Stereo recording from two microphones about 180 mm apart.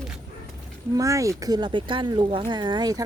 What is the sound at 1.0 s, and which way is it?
Speech, 15° right (ahead or behind).